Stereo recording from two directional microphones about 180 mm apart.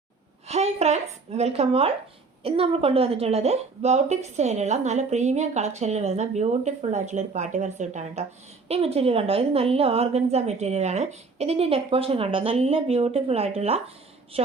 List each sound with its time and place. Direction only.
0.4 s a woman's voice: 35° right (ahead or behind)